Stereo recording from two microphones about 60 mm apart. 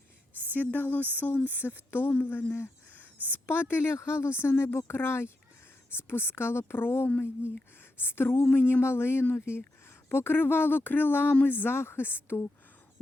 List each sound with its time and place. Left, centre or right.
0.5 s speech: left